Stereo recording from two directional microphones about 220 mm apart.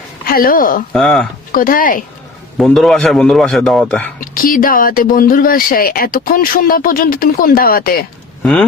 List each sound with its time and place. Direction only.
0.3 s speech: 40° left (ahead or behind)
0.9 s a man's voice: centre (ahead or behind)
1.5 s speech: 40° left (ahead or behind)
2.6 s a man's voice: centre (ahead or behind)
4.2 s speech: 40° left (ahead or behind)